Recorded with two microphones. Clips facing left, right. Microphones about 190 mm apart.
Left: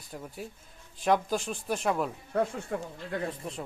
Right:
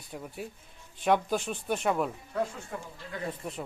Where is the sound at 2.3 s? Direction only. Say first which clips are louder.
Left 4 dB; 60° left (ahead or behind).